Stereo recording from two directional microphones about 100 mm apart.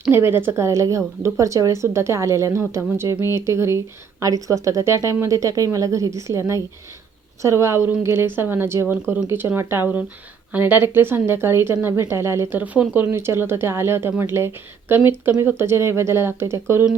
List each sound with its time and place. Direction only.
0.1 s a woman's voice: 25° right (ahead or behind)